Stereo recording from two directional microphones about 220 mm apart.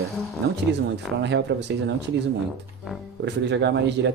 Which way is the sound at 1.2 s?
50° right (ahead or behind).